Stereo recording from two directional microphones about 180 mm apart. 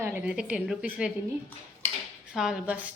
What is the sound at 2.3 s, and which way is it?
Speech, 5° right (ahead or behind).